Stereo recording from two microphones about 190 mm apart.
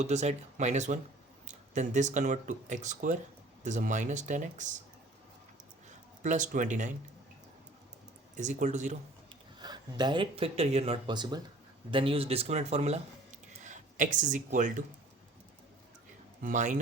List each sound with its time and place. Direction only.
0.0 s speech: 35° right (ahead or behind)
6.2 s speech: 40° right (ahead or behind)
8.4 s speech: 40° right (ahead or behind)
9.6 s speech: 20° right (ahead or behind); by 14.8 s 40° right (ahead or behind)
16.4 s speech: 40° right (ahead or behind)